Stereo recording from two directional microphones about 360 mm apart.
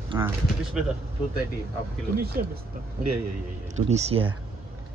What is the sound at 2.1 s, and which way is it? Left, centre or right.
Speech, right.